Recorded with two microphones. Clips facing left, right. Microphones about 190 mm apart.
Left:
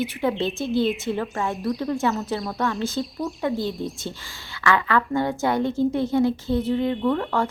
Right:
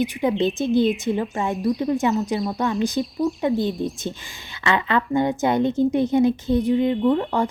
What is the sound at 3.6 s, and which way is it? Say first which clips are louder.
A woman's voice: right 4 dB; 20° right (ahead or behind).